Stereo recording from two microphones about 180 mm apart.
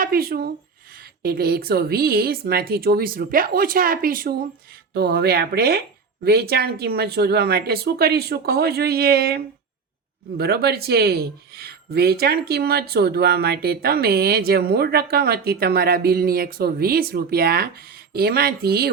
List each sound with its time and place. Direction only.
0.0 s speech: 55° right (ahead or behind)